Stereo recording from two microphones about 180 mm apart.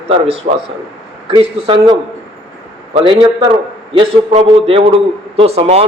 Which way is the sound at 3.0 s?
25° right (ahead or behind).